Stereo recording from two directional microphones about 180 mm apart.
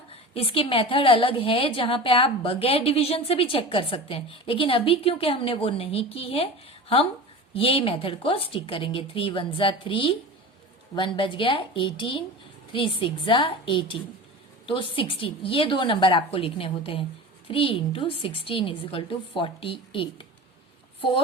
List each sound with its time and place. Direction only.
0.1 s a woman's voice: 30° left (ahead or behind)